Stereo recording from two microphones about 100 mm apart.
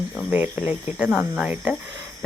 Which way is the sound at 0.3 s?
15° right (ahead or behind).